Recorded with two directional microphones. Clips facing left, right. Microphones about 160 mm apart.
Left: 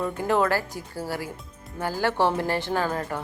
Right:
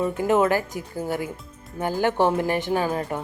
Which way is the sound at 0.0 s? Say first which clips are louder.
Right 3 dB; 20° right (ahead or behind).